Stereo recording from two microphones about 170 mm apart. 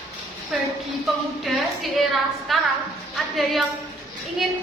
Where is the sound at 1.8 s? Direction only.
Centre (ahead or behind).